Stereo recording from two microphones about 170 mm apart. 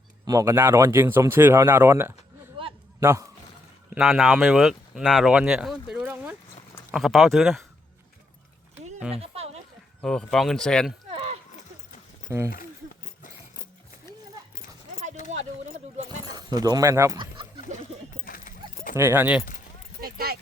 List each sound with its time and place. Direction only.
0.3 s speech: 15° right (ahead or behind)
2.6 s a sound: 30° right (ahead or behind)
3.0 s speech: 15° right (ahead or behind)
3.9 s speech: 5° right (ahead or behind)
9.1 s a sound: 35° right (ahead or behind)
10.0 s speech: 5° left (ahead or behind)
11.1 s a sound: 35° right (ahead or behind)
12.3 s speech: 20° right (ahead or behind)
14.5 s clip-clop: 55° left (ahead or behind)
16.3 s speech: 25° right (ahead or behind)
17.7 s dog: 45° right (ahead or behind)
18.3 s clip-clop: 55° left (ahead or behind)
18.9 s speech: 15° right (ahead or behind)
20.0 s keys jangling: 60° right (ahead or behind)